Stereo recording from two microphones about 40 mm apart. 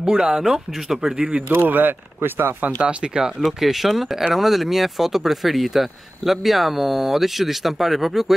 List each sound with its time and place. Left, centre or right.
0.0 s a man's voice: centre
1.7 s speech: right
2.6 s speech: right
3.3 s speech: centre